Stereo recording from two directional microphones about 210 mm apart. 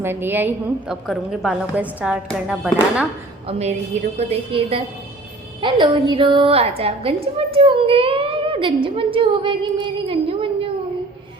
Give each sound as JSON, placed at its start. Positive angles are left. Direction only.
{"t": 0.0, "sound": "a woman's voice", "side_deg": -10}
{"t": 3.4, "sound": "a woman's voice", "side_deg": -30}